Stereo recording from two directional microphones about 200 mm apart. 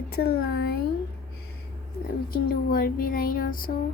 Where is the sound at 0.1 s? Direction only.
50° left (ahead or behind).